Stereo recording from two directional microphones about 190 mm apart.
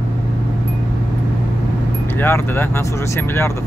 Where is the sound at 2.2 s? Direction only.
10° left (ahead or behind).